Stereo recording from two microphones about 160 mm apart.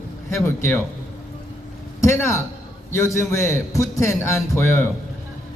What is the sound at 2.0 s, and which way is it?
A man's voice, 15° left (ahead or behind).